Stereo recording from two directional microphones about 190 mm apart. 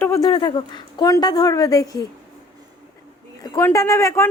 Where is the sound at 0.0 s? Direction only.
15° left (ahead or behind).